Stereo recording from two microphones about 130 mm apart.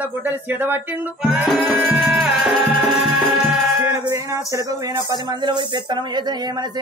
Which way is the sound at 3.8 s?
25° right (ahead or behind).